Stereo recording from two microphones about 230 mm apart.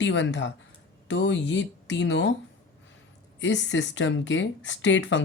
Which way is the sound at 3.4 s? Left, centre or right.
Left.